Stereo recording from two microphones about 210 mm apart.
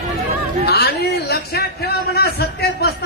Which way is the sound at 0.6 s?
50° left (ahead or behind).